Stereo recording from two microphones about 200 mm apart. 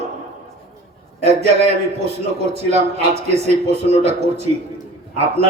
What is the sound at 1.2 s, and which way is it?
Speech, 30° right (ahead or behind).